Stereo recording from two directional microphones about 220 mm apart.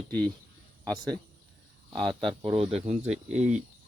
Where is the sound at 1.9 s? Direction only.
20° right (ahead or behind).